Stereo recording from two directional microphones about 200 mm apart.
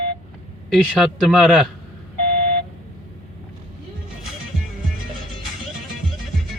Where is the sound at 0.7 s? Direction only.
Centre (ahead or behind).